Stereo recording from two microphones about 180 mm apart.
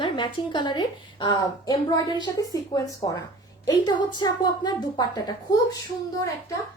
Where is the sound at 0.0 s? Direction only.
25° left (ahead or behind).